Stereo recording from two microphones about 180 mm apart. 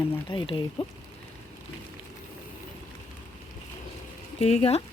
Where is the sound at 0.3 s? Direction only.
30° left (ahead or behind).